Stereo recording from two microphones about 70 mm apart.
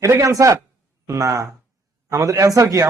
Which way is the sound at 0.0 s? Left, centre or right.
Right.